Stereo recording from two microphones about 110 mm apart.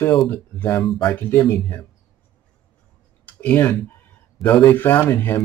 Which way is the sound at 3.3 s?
15° left (ahead or behind).